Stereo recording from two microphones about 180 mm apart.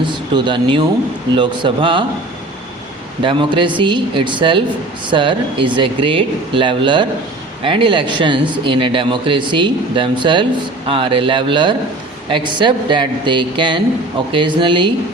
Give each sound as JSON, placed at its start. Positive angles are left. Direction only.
{"t": 0.3, "sound": "speech", "side_deg": -25}
{"t": 3.2, "sound": "speech", "side_deg": -25}